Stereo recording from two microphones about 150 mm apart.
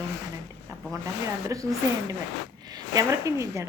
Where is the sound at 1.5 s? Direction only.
20° right (ahead or behind).